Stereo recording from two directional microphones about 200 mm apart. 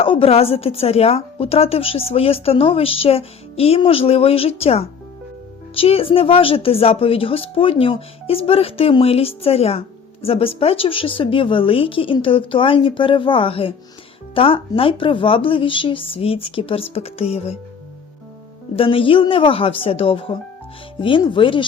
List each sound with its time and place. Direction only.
0.0 s speech: 30° left (ahead or behind)
18.8 s speech: 25° left (ahead or behind)